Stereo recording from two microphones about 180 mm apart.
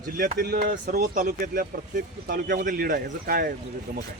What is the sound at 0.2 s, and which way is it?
Speech, 50° right (ahead or behind).